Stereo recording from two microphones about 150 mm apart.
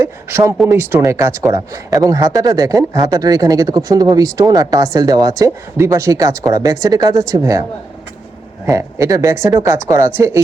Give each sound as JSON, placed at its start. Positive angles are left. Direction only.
{"t": 0.0, "sound": "speech", "side_deg": -15}
{"t": 8.6, "sound": "speech", "side_deg": -20}